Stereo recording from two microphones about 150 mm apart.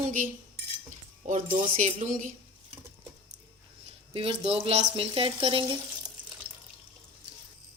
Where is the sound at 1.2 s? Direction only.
55° right (ahead or behind).